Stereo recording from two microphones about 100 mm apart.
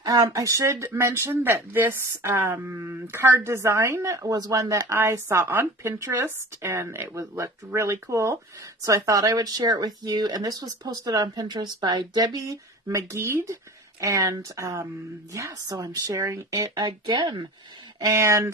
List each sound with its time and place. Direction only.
0.0 s speech: 35° right (ahead or behind); by 17.5 s 50° right (ahead or behind)
18.0 s speech: 30° right (ahead or behind)